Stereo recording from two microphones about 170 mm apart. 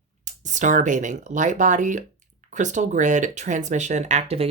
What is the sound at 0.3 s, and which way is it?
Speech, 45° right (ahead or behind).